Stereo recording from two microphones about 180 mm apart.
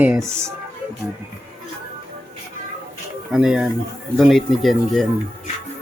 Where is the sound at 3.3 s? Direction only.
5° right (ahead or behind).